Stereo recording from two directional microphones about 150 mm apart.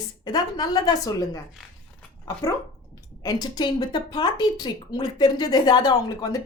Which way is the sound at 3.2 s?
25° left (ahead or behind).